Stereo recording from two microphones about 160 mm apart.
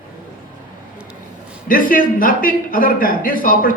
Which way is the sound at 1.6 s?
60° left (ahead or behind).